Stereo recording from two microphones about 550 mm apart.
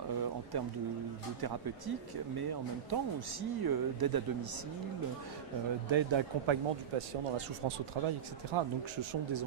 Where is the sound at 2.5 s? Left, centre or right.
Right.